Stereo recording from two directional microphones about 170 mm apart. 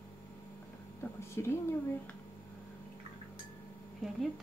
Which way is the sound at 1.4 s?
15° left (ahead or behind).